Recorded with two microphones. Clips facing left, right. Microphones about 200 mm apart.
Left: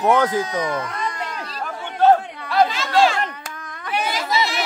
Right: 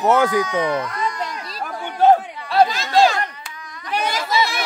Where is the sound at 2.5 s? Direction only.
35° right (ahead or behind).